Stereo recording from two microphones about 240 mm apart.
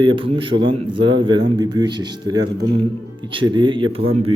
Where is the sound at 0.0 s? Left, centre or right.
Centre.